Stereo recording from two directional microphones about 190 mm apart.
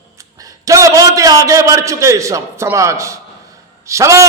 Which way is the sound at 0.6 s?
15° right (ahead or behind).